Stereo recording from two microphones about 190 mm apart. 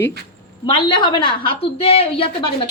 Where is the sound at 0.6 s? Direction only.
25° left (ahead or behind).